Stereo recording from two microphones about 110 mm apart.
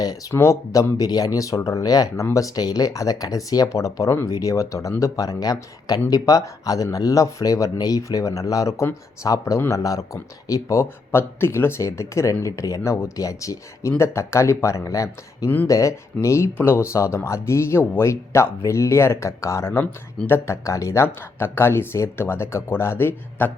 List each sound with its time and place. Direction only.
0.0 s speech: 35° left (ahead or behind)